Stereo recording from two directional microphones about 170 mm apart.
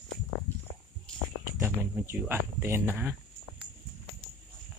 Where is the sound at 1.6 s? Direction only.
10° right (ahead or behind).